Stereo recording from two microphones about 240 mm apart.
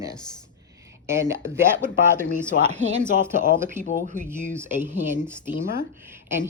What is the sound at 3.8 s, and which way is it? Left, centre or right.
Speech, centre.